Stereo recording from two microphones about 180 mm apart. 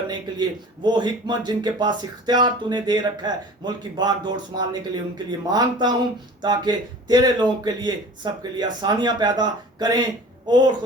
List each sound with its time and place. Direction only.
0.1 s speech: 25° right (ahead or behind)